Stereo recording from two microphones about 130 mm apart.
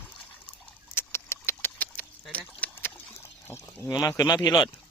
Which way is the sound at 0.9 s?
20° left (ahead or behind).